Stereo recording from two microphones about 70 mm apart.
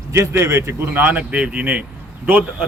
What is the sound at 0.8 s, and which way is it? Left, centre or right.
Speech, right.